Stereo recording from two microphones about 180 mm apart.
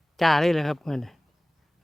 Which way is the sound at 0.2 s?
Centre (ahead or behind).